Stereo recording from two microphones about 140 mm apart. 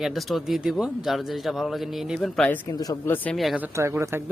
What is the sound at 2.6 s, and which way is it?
Speech, 25° left (ahead or behind).